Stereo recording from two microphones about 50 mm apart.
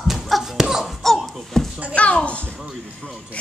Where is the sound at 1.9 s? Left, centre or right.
Left.